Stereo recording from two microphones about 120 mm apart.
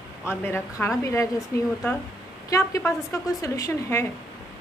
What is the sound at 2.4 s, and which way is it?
A woman's voice, 30° left (ahead or behind).